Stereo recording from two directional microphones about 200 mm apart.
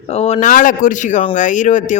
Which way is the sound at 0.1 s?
30° left (ahead or behind).